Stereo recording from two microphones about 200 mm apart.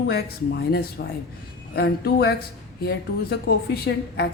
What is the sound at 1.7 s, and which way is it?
A woman's voice, 50° left (ahead or behind).